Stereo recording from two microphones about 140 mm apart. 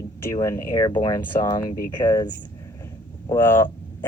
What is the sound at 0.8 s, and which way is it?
Speech, 30° left (ahead or behind).